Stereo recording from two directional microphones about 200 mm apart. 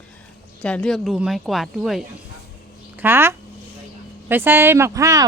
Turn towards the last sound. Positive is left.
turn(degrees=-15)  # may be behind; listen again after turning